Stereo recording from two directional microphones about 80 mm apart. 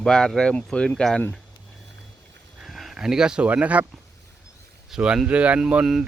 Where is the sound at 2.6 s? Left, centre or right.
Centre.